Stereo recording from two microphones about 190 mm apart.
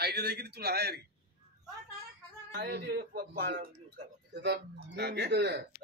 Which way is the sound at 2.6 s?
60° right (ahead or behind).